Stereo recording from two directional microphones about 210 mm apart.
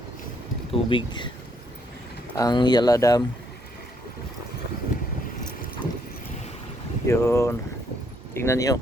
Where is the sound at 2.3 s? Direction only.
20° left (ahead or behind).